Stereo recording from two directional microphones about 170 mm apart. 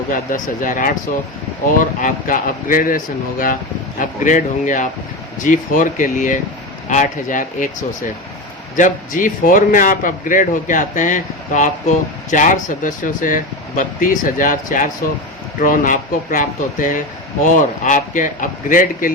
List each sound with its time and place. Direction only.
0.1 s a man's voice: 55° left (ahead or behind)
2.0 s a man's voice: 50° left (ahead or behind)
8.7 s a man's voice: 50° left (ahead or behind)